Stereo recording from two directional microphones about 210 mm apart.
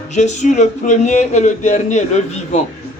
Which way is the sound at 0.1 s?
35° left (ahead or behind).